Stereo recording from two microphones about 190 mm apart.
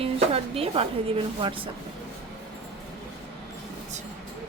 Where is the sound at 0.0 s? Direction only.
30° right (ahead or behind).